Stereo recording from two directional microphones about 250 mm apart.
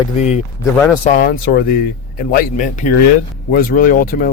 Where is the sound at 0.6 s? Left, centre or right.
Centre.